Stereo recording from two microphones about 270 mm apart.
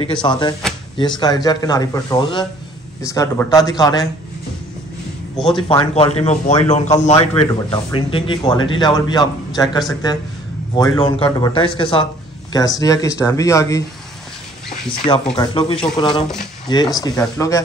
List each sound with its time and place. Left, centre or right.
0.0 s a man's voice: centre
5.6 s a man's voice: centre
14.9 s a man's voice: centre